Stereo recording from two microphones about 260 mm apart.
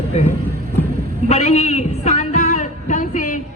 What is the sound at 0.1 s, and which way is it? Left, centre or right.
Speech, left.